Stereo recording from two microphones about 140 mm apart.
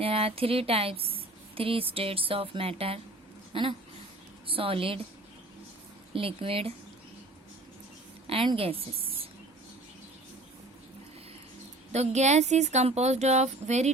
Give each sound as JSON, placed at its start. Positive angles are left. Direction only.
{"t": 0.0, "sound": "speech", "side_deg": -45}
{"t": 6.1, "sound": "speech", "side_deg": -40}
{"t": 8.3, "sound": "speech", "side_deg": -40}
{"t": 11.9, "sound": "speech", "side_deg": -55}